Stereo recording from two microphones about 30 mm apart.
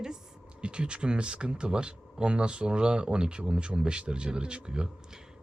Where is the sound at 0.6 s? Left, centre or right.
Right.